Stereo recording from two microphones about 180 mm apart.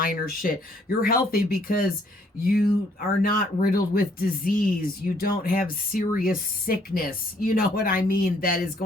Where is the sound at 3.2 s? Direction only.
55° left (ahead or behind).